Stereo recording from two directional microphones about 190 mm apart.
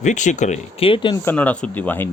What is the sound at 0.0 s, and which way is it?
Speech, 40° left (ahead or behind).